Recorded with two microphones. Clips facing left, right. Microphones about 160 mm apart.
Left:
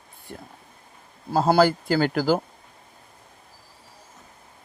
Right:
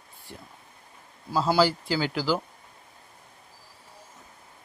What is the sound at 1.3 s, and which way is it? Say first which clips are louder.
Speech: left 4 dB; 50° left (ahead or behind).